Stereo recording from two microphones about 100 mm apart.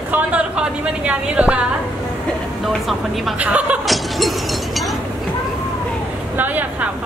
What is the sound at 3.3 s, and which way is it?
Speech, 15° right (ahead or behind).